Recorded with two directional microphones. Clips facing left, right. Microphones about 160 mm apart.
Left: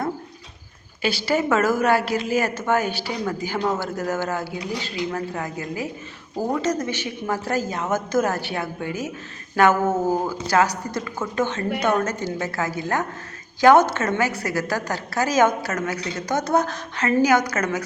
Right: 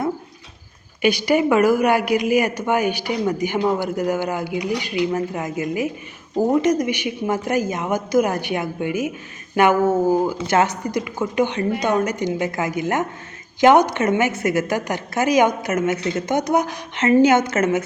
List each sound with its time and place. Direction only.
1.0 s speech: 15° right (ahead or behind)
10.3 s a woman's voice: 25° right (ahead or behind)